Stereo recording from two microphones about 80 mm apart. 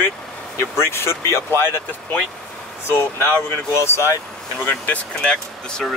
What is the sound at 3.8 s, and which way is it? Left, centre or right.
Speech, left.